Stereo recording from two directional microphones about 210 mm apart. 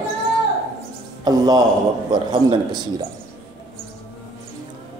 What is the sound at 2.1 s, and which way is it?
Speech, 20° right (ahead or behind).